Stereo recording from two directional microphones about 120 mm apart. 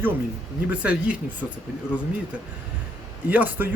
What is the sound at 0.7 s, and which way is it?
Speech, 10° right (ahead or behind).